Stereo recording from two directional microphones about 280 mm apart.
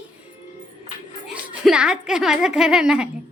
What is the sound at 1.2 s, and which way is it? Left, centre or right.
A woman's voice, centre.